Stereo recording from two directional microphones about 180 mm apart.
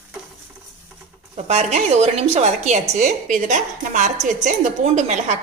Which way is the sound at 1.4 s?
35° right (ahead or behind).